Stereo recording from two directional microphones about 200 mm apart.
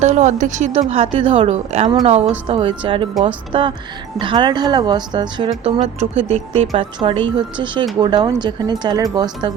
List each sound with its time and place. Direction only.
0.0 s a woman's voice: 35° right (ahead or behind); by 9.5 s 20° right (ahead or behind)